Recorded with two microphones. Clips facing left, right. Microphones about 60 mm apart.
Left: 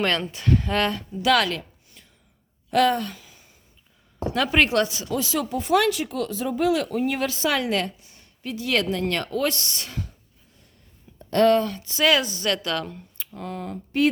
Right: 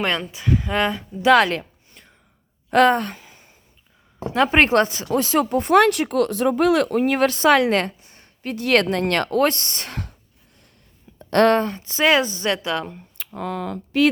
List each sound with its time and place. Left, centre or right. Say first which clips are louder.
0.2 s speech: even; centre
1.2 s a sound: right 6 dB; right
4.4 s speech: right 5 dB; right
8.5 s speech: right 6 dB; right
9.4 s speech: right 6 dB; right
9.9 s speech: right 2 dB; right
11.2 s speech: right 2 dB; right
11.6 s a woman's voice: right 2 dB; right
13.1 s speech: right 7 dB; right